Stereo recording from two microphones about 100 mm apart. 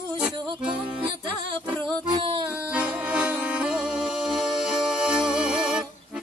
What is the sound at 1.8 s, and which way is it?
Music, 55° right (ahead or behind).